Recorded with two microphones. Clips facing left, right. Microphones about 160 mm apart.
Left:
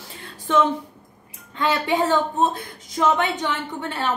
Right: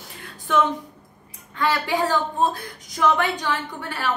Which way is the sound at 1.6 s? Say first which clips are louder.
Left 1 dB; 20° left (ahead or behind).